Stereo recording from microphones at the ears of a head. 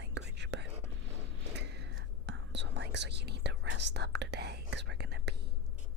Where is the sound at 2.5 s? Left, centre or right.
Right.